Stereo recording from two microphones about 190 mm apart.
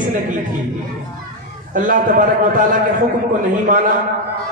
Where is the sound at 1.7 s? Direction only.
45° right (ahead or behind).